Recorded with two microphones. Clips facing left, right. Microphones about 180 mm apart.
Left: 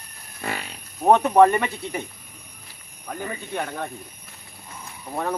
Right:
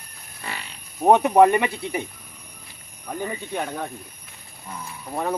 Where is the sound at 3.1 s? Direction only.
10° right (ahead or behind).